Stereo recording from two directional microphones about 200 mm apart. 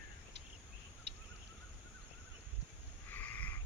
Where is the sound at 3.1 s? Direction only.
10° left (ahead or behind).